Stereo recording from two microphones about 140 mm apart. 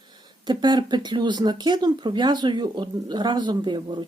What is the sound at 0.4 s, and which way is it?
A woman's voice, 30° right (ahead or behind).